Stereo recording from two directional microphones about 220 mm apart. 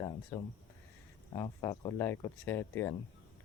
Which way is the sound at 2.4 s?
10° left (ahead or behind).